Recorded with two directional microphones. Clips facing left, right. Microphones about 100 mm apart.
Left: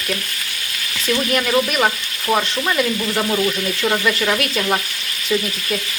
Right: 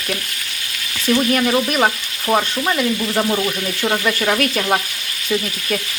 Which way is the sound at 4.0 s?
30° right (ahead or behind).